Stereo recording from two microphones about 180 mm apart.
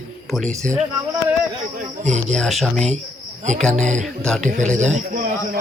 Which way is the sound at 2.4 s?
Centre (ahead or behind).